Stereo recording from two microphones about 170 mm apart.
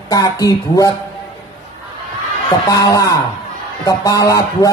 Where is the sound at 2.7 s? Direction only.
20° left (ahead or behind).